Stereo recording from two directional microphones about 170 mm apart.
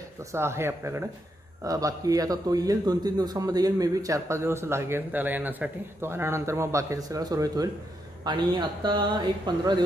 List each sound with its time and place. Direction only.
0.3 s a man's voice: 15° right (ahead or behind)